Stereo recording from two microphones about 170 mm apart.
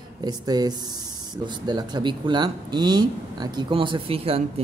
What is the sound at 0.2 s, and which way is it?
Speech, 25° right (ahead or behind).